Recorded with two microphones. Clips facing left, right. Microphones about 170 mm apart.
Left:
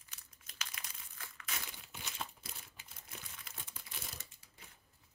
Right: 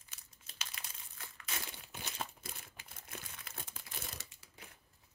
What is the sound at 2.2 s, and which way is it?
Crushing, 55° right (ahead or behind).